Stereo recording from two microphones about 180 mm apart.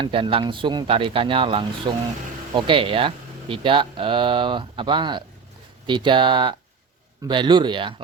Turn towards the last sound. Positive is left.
turn(degrees=-25)  # may be behind; listen again after turning